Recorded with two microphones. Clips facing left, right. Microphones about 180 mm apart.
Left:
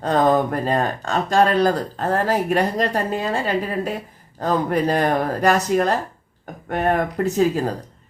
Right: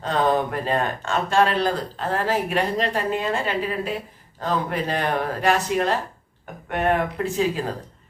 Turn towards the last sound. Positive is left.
turn(degrees=40)  # may be behind; listen again after turning